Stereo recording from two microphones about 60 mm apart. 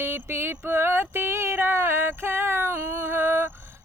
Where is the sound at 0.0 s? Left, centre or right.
Right.